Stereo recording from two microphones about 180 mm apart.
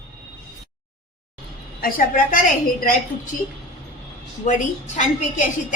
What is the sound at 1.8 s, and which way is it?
A woman's voice, 50° left (ahead or behind).